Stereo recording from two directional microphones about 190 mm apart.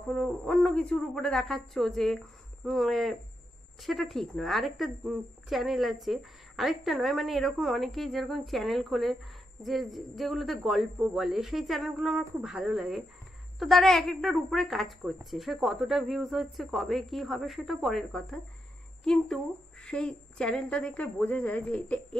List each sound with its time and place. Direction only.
0.1 s a woman's voice: 5° left (ahead or behind)